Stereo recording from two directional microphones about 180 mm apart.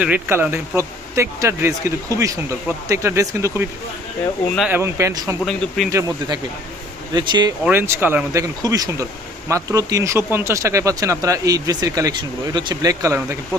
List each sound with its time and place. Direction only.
0.0 s speech: 10° right (ahead or behind)
4.7 s speech: 15° right (ahead or behind)
5.4 s speech: 5° left (ahead or behind)
5.9 s speech: 20° right (ahead or behind)
7.6 s speech: 10° right (ahead or behind)